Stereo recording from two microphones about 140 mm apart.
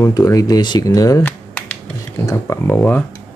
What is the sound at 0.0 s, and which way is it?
Speech, 25° left (ahead or behind).